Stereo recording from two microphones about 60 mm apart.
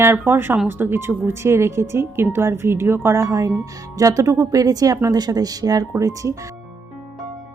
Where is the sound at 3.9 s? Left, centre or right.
Right.